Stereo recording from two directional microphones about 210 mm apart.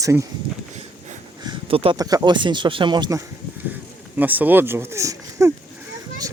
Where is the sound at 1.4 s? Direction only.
25° right (ahead or behind).